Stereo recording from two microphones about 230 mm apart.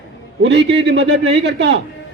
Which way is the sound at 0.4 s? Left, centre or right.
Right.